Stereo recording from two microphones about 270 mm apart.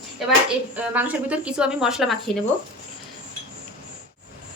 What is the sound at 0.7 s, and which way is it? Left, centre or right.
Speech, centre.